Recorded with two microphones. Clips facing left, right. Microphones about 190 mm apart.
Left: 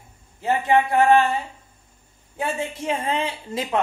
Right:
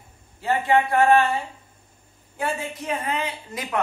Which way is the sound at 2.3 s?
25° left (ahead or behind).